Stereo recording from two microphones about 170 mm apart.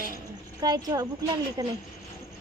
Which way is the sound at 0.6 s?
20° right (ahead or behind).